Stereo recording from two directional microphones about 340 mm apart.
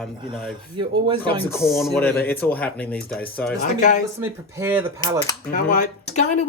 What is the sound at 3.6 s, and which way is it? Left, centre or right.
Speech, left.